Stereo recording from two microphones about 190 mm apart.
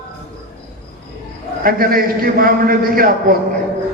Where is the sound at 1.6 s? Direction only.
50° right (ahead or behind).